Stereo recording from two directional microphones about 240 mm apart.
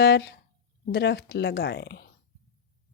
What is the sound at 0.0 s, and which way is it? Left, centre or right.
A woman's voice, left.